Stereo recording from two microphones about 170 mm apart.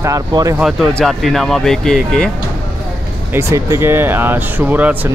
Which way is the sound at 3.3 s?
15° right (ahead or behind).